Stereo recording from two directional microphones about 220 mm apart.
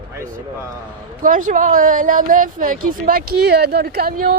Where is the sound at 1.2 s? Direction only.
35° right (ahead or behind).